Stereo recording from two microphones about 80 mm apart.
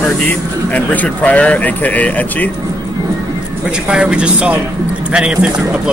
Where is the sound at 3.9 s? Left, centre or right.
Centre.